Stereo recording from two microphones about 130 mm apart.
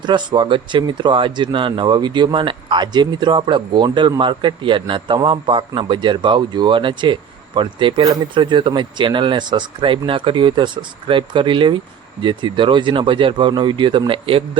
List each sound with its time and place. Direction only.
0.0 s speech: 35° right (ahead or behind)